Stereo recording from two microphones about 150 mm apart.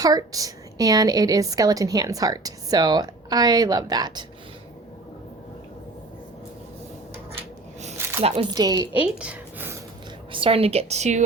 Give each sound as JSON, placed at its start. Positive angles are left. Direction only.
{"t": 0.0, "sound": "a woman's voice", "side_deg": -25}
{"t": 8.0, "sound": "a sound", "side_deg": -15}
{"t": 8.5, "sound": "a woman's voice", "side_deg": -25}
{"t": 8.9, "sound": "a woman's voice", "side_deg": -10}
{"t": 10.3, "sound": "a woman's voice", "side_deg": -40}